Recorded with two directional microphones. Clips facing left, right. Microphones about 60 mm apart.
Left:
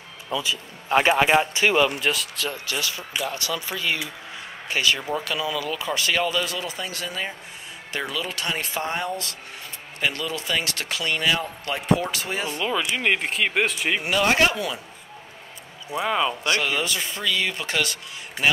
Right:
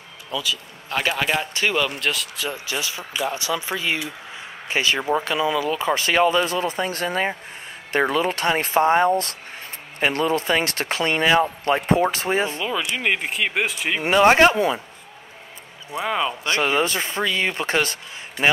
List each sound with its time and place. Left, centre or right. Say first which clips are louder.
0.3 s speech: even; left; by 2.5 s centre
2.5 s speech: right 1 dB; right
12.6 s speech: even; centre
14.0 s speech: right 7 dB; right
16.0 s speech: even; centre
16.4 s speech: right 3 dB; right